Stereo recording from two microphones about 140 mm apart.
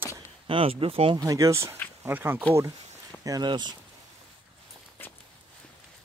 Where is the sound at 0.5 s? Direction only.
40° right (ahead or behind).